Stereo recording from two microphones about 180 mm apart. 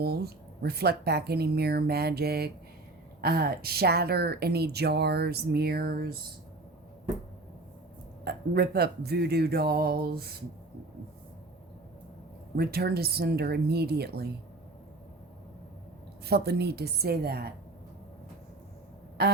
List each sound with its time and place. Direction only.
0.0 s speech: 60° right (ahead or behind)
8.2 s speech: 60° right (ahead or behind)
12.5 s speech: 60° right (ahead or behind)
16.2 s speech: 65° right (ahead or behind)